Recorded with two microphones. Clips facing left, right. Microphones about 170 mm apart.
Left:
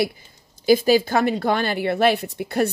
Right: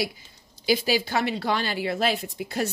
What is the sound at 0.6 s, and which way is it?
A woman's voice, 45° left (ahead or behind).